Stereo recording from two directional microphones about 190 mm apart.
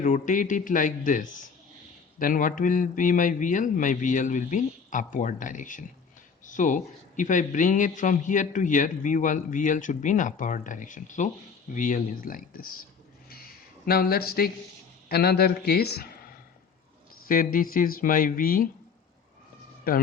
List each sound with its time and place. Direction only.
0.0 s a man's voice: 40° left (ahead or behind)
13.3 s a sound: 55° left (ahead or behind)
15.1 s a man's voice: 55° left (ahead or behind)